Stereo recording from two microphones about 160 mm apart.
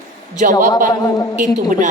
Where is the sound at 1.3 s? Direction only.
55° right (ahead or behind).